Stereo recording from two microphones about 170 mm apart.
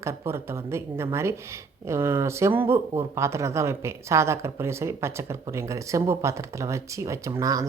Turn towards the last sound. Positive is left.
turn(degrees=-20)  # may be behind; listen again after turning